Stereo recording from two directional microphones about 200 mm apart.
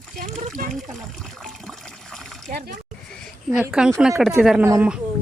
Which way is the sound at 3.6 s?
5° right (ahead or behind).